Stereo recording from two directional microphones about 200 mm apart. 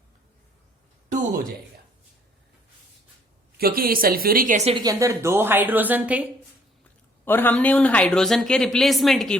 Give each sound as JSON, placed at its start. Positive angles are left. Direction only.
{"t": 1.1, "sound": "a woman's voice", "side_deg": -40}
{"t": 3.6, "sound": "a woman's voice", "side_deg": -45}
{"t": 4.7, "sound": "a woman's voice", "side_deg": -20}
{"t": 7.3, "sound": "speech", "side_deg": 10}